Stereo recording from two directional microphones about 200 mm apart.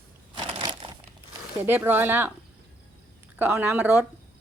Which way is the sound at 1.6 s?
10° right (ahead or behind).